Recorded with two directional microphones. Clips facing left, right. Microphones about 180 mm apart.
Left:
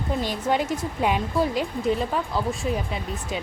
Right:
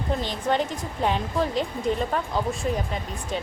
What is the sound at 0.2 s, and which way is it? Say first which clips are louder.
Speech: left 1 dB; 10° left (ahead or behind).